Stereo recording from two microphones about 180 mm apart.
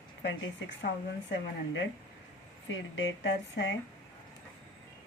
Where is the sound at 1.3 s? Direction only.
80° left.